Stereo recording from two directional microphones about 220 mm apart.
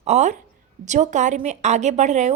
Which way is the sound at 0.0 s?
30° right (ahead or behind).